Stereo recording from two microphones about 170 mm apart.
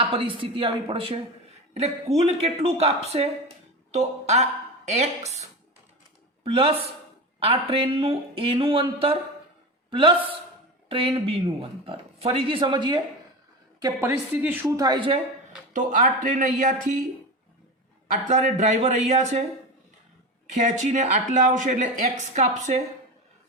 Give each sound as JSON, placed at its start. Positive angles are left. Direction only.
{"t": 0.0, "sound": "speech", "side_deg": -30}
{"t": 13.8, "sound": "a woman's voice", "side_deg": -15}
{"t": 15.7, "sound": "speech", "side_deg": -50}
{"t": 18.3, "sound": "speech", "side_deg": -45}
{"t": 20.5, "sound": "speech", "side_deg": -45}